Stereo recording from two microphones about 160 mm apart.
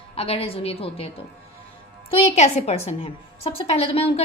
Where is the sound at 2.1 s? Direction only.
45° left (ahead or behind).